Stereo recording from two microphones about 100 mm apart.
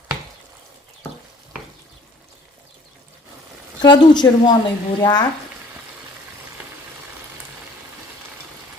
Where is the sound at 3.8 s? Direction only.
45° left (ahead or behind).